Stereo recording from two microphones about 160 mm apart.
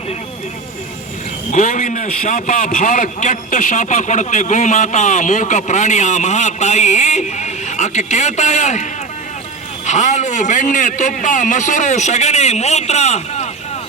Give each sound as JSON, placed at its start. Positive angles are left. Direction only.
{"t": 1.5, "sound": "a man's voice", "side_deg": 50}